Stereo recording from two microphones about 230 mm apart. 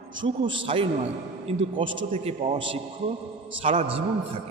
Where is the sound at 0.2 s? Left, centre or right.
Right.